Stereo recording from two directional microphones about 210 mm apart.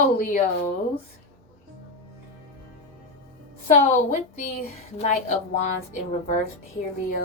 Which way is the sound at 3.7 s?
35° left (ahead or behind).